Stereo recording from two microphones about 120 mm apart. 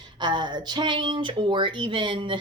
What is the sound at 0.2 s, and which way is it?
Speech, 40° right (ahead or behind).